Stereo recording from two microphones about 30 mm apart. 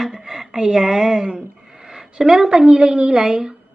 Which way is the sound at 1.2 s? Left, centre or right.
Right.